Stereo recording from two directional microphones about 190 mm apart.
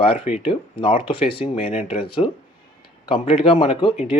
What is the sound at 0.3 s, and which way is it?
Speech, 30° left (ahead or behind).